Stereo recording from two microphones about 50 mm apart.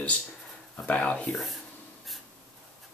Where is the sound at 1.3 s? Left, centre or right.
Centre.